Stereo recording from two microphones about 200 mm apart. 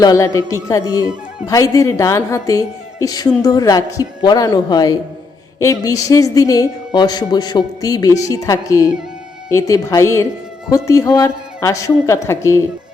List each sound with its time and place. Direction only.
0.0 s a woman's voice: 15° left (ahead or behind)